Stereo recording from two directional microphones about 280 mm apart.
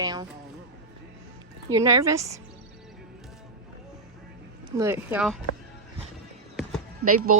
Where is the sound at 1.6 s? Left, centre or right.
Centre.